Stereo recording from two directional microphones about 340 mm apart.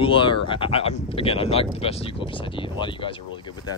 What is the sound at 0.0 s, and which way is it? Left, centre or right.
Speech, centre.